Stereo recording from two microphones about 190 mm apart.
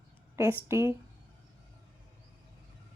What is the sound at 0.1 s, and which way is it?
Speech, 10° right (ahead or behind).